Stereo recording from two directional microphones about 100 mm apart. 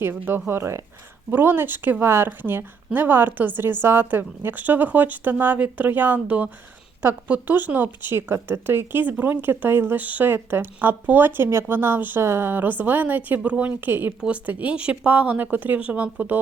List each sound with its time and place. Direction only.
0.0 s speech: 20° right (ahead or behind)